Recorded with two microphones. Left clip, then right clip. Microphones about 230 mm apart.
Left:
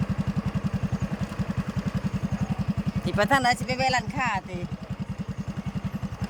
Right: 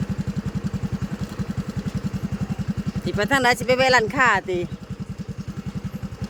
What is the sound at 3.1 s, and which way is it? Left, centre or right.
Speech, centre.